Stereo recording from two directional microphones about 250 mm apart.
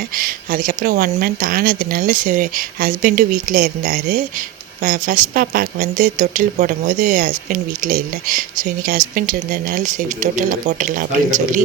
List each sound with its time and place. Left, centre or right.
0.2 s speech: right